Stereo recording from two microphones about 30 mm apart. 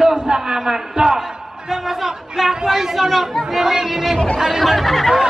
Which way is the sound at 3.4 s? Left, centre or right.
Centre.